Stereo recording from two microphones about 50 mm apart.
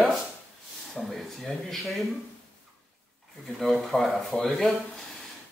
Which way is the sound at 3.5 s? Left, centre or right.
Centre.